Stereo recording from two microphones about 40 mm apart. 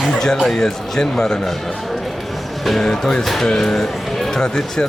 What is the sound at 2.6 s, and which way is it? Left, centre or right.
Speech, centre.